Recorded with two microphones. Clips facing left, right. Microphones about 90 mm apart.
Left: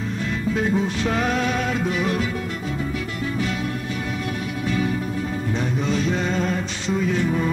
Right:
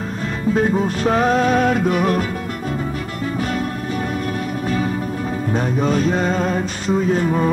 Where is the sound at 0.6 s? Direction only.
45° right (ahead or behind).